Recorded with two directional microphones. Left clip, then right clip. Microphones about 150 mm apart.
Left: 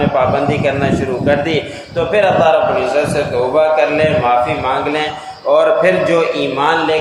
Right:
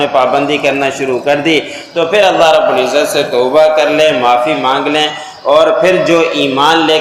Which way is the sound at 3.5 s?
35° right (ahead or behind).